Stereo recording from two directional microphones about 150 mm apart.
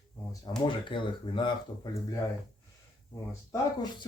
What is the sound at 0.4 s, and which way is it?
Speech, 30° left (ahead or behind).